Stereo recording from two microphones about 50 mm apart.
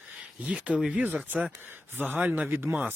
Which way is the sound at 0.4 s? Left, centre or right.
Right.